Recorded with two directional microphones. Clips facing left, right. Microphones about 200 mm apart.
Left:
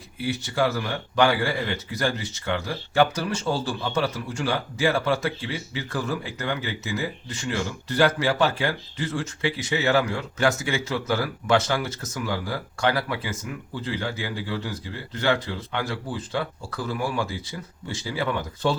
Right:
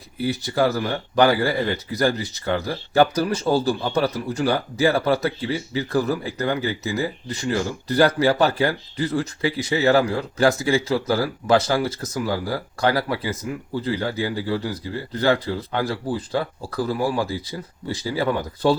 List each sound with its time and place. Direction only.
0.2 s speech: 40° right (ahead or behind)